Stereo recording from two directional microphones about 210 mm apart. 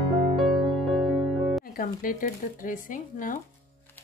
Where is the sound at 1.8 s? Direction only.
40° left (ahead or behind).